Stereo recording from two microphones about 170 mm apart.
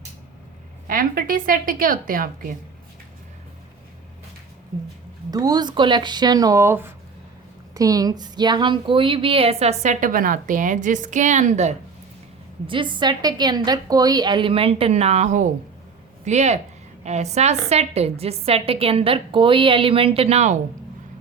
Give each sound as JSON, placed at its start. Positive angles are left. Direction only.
{"t": 0.9, "sound": "a woman's voice", "side_deg": -55}
{"t": 5.3, "sound": "a woman's voice", "side_deg": -25}
{"t": 12.6, "sound": "a woman's voice", "side_deg": -30}